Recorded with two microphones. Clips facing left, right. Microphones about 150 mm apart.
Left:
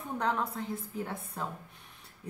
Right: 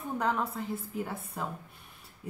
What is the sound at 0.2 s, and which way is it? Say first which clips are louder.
Speech: even; 5° right (ahead or behind).